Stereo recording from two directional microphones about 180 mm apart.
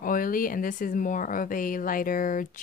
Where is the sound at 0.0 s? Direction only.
50° left (ahead or behind).